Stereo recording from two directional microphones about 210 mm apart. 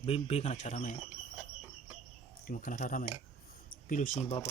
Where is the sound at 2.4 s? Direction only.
40° left (ahead or behind).